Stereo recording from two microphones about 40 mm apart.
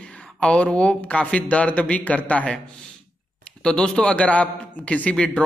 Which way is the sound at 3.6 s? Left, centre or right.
Left.